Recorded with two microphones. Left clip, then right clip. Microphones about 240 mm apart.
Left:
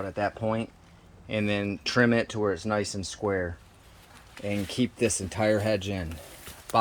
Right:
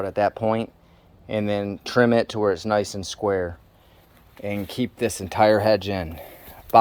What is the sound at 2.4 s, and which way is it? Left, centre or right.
Speech, centre.